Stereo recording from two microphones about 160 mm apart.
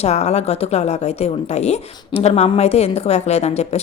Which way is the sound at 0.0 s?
40° left (ahead or behind).